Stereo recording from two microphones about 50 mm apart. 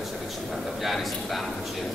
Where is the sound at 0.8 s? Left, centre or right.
Centre.